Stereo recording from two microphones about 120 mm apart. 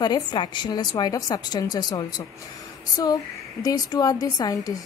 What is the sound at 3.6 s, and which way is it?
Speech, 30° left (ahead or behind).